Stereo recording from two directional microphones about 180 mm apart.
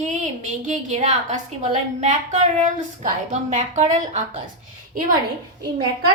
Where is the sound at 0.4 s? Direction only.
45° right (ahead or behind).